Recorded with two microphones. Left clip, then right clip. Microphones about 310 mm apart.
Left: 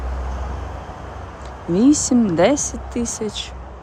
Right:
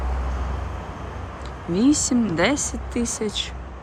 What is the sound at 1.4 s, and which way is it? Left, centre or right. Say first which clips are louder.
Speech: left 4 dB; centre.